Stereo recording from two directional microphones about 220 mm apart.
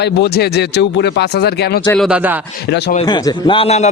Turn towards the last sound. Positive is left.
turn(degrees=30)  # may be behind; listen again after turning